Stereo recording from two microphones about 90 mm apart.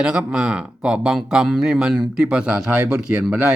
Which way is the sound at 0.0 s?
10° right (ahead or behind).